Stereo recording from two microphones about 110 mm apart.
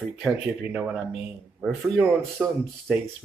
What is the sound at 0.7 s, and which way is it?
Speech, 15° right (ahead or behind).